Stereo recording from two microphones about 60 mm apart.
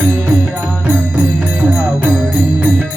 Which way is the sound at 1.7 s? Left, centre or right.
Right.